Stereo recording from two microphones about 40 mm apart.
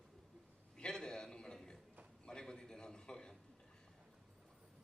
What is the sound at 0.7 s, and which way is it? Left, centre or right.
A man's voice, centre.